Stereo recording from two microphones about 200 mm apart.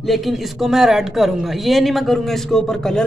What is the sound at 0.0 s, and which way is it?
Speech, centre (ahead or behind).